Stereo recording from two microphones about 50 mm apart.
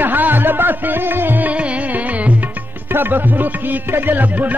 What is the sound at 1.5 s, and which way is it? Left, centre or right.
Music, right.